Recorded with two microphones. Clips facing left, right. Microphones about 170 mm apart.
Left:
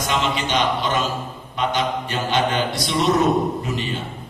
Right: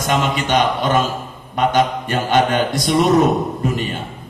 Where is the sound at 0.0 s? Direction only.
50° right (ahead or behind).